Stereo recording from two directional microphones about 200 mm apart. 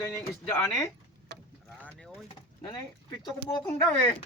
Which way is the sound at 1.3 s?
60° right (ahead or behind).